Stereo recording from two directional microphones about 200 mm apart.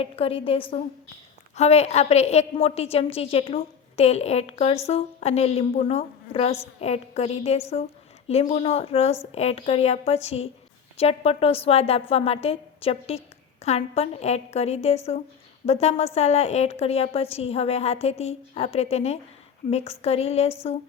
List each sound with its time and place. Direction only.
0.0 s a woman's voice: 30° left (ahead or behind)